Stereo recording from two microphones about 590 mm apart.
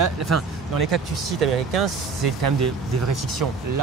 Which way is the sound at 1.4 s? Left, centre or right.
Right.